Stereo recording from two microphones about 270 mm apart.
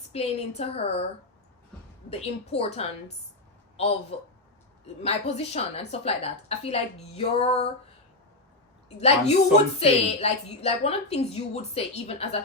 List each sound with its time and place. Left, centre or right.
0.1 s a woman's voice: left
2.0 s a woman's voice: left
4.1 s a woman's voice: left
9.0 s a woman's voice: left